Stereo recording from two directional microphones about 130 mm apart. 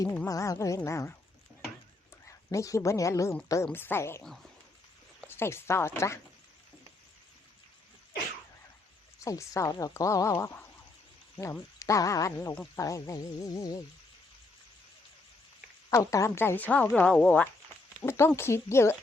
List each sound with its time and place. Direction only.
0.3 s speech: 25° left (ahead or behind)
2.2 s a woman's voice: 25° left (ahead or behind)
5.3 s speech: 20° left (ahead or behind)
9.2 s speech: 25° left (ahead or behind)
11.8 s speech: 25° left (ahead or behind)
15.9 s speech: 25° left (ahead or behind)